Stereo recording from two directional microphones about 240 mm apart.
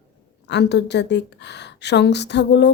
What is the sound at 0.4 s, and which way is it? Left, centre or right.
A woman's voice, left.